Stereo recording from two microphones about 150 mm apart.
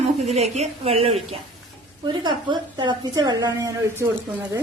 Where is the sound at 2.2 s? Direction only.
30° right (ahead or behind).